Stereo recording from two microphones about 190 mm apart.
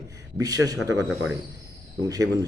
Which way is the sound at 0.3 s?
20° right (ahead or behind).